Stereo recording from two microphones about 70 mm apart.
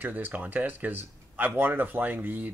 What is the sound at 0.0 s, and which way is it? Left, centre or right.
Speech, right.